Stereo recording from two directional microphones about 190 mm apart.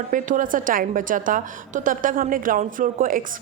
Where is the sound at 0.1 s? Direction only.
45° right (ahead or behind).